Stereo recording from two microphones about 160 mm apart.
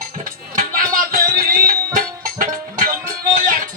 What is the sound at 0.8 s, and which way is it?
Music, 60° right (ahead or behind).